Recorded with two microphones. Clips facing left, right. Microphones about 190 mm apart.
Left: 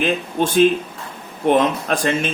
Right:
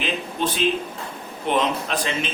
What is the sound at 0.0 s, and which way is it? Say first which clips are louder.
Speech: left 6 dB; 50° left (ahead or behind).